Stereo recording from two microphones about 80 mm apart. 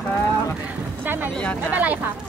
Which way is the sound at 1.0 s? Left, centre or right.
Right.